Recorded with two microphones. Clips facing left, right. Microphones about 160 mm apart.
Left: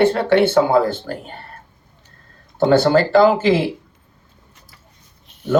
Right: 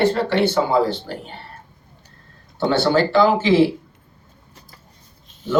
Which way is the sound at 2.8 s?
40° left (ahead or behind).